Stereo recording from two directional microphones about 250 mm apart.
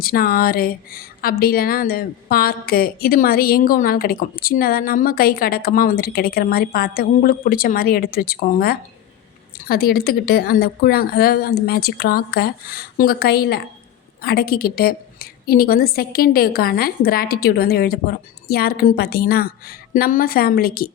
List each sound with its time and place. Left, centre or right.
0.0 s speech: left